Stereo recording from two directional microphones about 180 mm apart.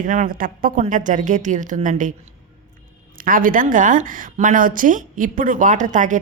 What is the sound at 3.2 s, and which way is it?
A woman's voice, 50° right (ahead or behind).